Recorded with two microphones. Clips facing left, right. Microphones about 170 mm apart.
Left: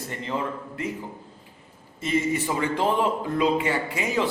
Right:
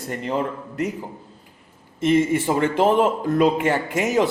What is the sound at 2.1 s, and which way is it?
A man's voice, 55° right (ahead or behind).